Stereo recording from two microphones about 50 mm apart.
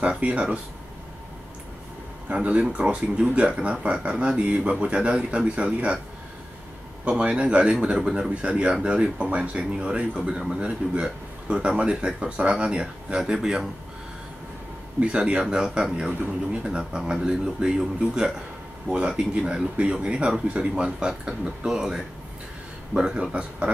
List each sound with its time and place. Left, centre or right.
0.0 s speech: right
2.2 s speech: right
7.1 s a man's voice: right
15.0 s a man's voice: right
19.4 s a man's voice: right